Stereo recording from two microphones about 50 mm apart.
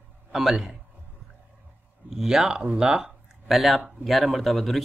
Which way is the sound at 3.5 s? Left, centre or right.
Centre.